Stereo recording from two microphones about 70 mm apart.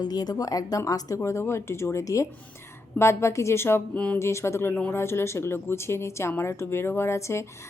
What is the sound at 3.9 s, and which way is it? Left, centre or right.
Speech, centre.